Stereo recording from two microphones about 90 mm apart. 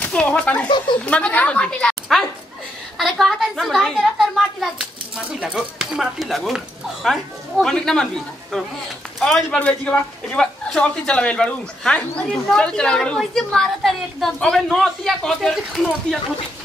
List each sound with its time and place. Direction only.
0.0 s speech: 10° left (ahead or behind)
0.7 s speech: 60° left (ahead or behind)
1.0 s a woman's voice: 15° left (ahead or behind)